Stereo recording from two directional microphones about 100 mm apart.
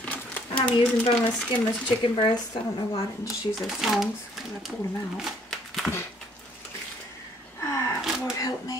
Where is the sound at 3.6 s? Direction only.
5° right (ahead or behind).